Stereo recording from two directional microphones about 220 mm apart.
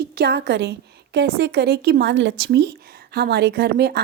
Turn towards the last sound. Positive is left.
turn(degrees=-45)  # may be behind; listen again after turning